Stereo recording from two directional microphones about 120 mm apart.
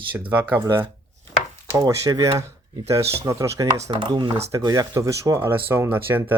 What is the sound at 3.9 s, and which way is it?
Speech, 40° right (ahead or behind).